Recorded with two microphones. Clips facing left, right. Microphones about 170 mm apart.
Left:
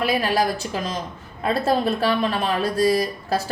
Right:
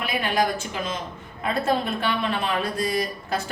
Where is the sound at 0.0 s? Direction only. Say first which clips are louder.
Left 3 dB; 35° left (ahead or behind).